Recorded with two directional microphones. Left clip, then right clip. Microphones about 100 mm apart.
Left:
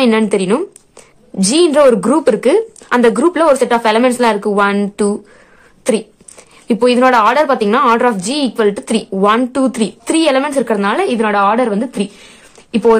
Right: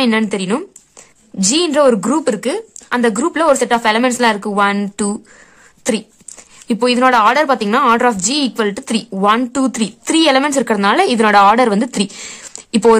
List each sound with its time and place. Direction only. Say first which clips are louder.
0.0 s a woman's voice: left 4 dB; 25° right (ahead or behind)
3.2 s a woman's voice: left 3 dB; 30° right (ahead or behind)
6.7 s a woman's voice: left 2 dB; 35° right (ahead or behind); by 12.1 s 75° right (ahead or behind)